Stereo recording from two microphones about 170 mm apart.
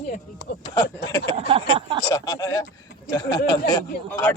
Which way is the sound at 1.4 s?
35° right (ahead or behind).